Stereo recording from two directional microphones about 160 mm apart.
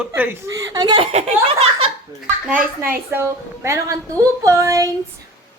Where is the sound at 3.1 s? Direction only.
15° right (ahead or behind).